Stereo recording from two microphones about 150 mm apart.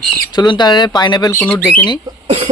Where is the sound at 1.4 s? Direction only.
10° left (ahead or behind).